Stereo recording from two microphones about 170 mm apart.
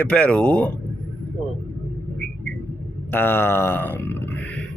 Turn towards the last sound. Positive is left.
turn(degrees=10)  # may be behind; listen again after turning